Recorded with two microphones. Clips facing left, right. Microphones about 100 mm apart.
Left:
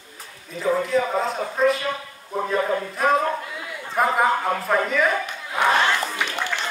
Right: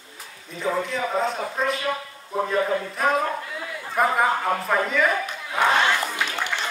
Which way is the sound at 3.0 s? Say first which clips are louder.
Left 3 dB; centre (ahead or behind).